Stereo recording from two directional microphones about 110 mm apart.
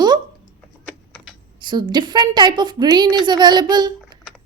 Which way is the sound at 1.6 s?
45° right (ahead or behind).